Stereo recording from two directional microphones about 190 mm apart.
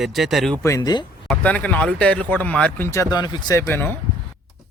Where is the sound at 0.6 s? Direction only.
20° left (ahead or behind).